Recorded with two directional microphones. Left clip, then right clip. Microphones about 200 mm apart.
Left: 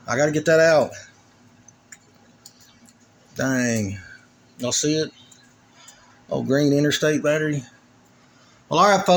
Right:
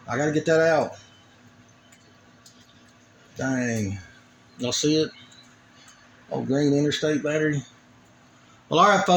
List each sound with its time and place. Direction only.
0.0 s speech: 10° left (ahead or behind)
3.3 s speech: 15° left (ahead or behind)
6.2 s speech: 20° left (ahead or behind)
7.3 s speech: 5° left (ahead or behind)
8.7 s speech: 5° left (ahead or behind)